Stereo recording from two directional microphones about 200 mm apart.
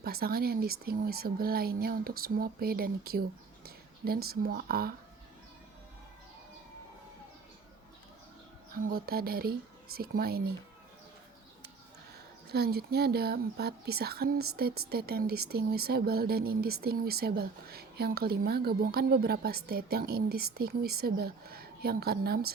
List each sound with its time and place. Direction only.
0.0 s speech: 50° right (ahead or behind)
8.8 s speech: 50° right (ahead or behind)
12.5 s speech: 55° right (ahead or behind)